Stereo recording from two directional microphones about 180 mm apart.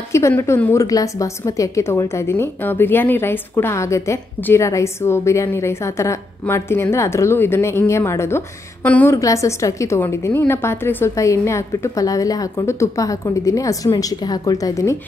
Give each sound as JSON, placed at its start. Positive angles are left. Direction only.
{"t": 0.1, "sound": "a woman's voice", "side_deg": 15}